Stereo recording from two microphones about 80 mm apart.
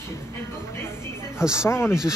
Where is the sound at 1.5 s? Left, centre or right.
Left.